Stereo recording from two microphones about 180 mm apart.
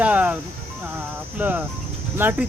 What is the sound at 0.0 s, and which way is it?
Music, 10° right (ahead or behind).